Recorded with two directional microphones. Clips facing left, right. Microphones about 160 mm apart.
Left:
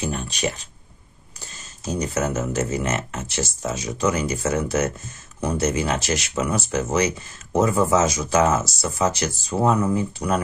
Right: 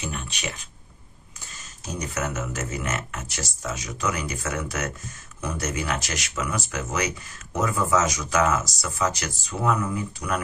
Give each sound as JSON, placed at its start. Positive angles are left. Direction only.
{"t": 0.0, "sound": "speech", "side_deg": 35}
{"t": 1.9, "sound": "speech", "side_deg": 30}